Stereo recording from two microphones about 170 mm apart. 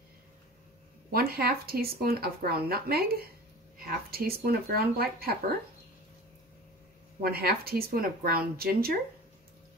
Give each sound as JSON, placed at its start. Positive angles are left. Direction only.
{"t": 1.1, "sound": "speech", "side_deg": -65}
{"t": 7.2, "sound": "speech", "side_deg": -60}